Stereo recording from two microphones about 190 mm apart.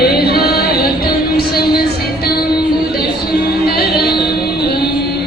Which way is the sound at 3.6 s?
55° left (ahead or behind).